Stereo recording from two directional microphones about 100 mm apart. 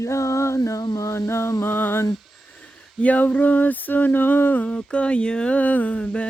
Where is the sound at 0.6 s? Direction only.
45° left (ahead or behind).